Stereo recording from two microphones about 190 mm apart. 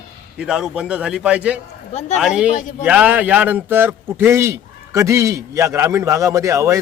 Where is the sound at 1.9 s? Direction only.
35° left (ahead or behind).